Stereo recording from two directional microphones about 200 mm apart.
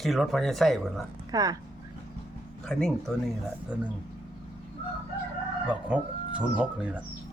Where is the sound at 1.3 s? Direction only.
20° right (ahead or behind).